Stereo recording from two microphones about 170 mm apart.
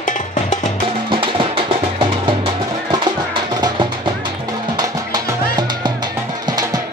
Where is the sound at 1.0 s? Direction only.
30° right (ahead or behind).